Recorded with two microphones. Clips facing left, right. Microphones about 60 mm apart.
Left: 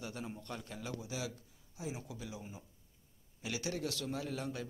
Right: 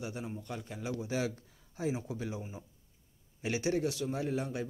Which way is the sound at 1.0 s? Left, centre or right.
Right.